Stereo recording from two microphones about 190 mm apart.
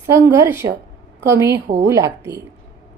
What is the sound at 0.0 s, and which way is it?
A woman's voice, 15° right (ahead or behind).